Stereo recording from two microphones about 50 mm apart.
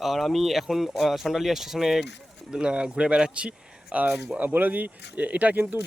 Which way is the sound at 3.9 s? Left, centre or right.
Right.